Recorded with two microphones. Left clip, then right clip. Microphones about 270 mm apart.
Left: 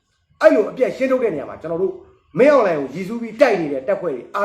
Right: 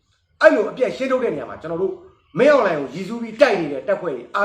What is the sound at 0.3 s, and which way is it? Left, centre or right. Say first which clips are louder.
A man's voice: left 1 dB; centre.